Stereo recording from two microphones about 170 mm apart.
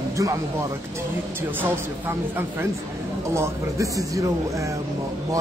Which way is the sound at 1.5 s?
10° right (ahead or behind).